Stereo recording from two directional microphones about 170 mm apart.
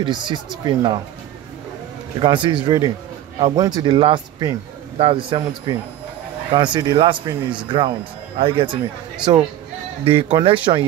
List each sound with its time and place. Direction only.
0.0 s speech: 30° right (ahead or behind)
2.1 s speech: 30° right (ahead or behind)